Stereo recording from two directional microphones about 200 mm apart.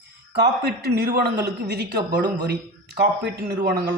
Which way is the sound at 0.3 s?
55° right (ahead or behind).